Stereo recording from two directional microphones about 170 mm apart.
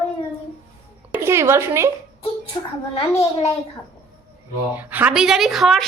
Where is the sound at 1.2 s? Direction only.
15° right (ahead or behind).